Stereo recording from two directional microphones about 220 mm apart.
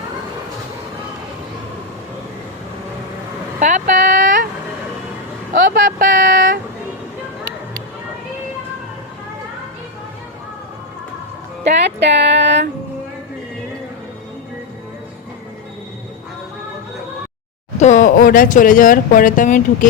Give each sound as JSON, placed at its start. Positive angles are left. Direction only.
{"t": 3.6, "sound": "vehicle", "side_deg": -35}
{"t": 5.7, "sound": "vehicle", "side_deg": -40}
{"t": 11.9, "sound": "a sound", "side_deg": -50}
{"t": 17.7, "sound": "speech", "side_deg": 35}